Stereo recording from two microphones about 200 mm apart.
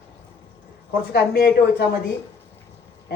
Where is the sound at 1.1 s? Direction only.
55° left (ahead or behind).